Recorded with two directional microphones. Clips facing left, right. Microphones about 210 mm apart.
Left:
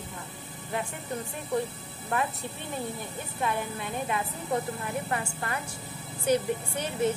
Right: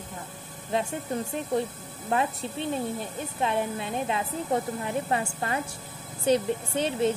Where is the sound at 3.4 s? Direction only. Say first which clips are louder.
Right 3 dB; 25° right (ahead or behind).